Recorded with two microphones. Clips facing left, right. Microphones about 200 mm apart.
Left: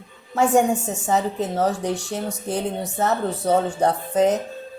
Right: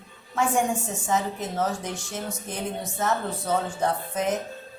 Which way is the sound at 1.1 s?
35° left (ahead or behind).